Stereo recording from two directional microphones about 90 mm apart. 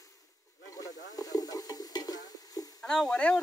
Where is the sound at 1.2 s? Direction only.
40° left (ahead or behind).